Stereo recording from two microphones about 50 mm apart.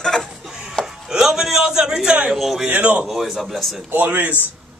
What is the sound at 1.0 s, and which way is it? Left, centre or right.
A man's voice, centre.